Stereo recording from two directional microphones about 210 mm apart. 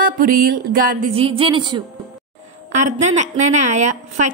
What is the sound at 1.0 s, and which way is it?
Speech, 25° right (ahead or behind).